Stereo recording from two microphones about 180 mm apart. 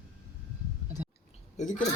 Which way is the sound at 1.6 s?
45° left (ahead or behind).